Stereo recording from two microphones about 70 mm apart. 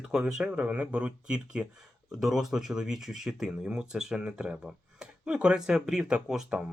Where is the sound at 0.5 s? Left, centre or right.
Right.